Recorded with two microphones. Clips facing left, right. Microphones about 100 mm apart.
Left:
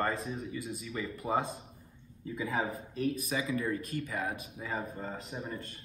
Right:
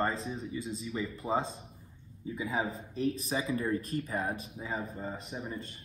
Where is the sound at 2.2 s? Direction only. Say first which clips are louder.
Even; 5° right (ahead or behind).